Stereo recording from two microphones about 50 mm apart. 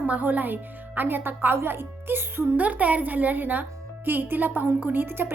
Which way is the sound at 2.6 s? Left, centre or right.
Right.